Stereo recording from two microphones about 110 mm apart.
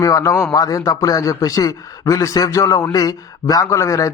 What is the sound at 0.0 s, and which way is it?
A man's voice, 30° left (ahead or behind).